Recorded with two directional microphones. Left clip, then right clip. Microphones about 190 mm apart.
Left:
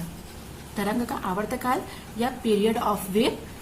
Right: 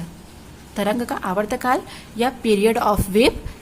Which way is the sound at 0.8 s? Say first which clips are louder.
Right 6 dB; 40° right (ahead or behind).